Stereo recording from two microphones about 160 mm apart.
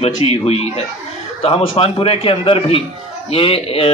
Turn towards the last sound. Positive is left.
turn(degrees=35)  # may be behind; listen again after turning